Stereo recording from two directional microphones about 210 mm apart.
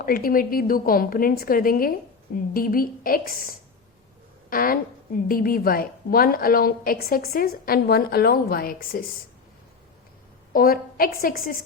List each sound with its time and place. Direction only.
0.0 s a woman's voice: 45° left (ahead or behind)
10.5 s a woman's voice: 45° left (ahead or behind)